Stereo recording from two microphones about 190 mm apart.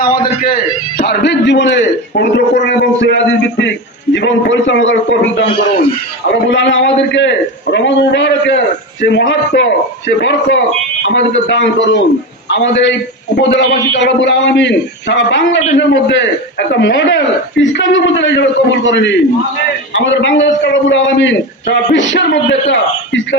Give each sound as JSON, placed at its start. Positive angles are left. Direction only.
{"t": 0.0, "sound": "a man's voice", "side_deg": 50}